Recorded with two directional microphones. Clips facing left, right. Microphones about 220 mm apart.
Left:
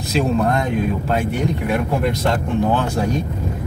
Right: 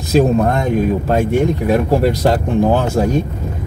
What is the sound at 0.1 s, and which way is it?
Speech, 40° right (ahead or behind).